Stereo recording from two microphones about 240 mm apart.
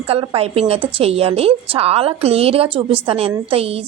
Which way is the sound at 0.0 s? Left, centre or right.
Right.